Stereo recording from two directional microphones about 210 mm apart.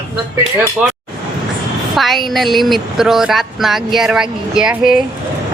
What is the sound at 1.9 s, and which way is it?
Speech, centre (ahead or behind).